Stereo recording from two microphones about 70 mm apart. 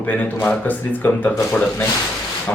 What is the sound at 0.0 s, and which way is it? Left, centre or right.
Speech, left.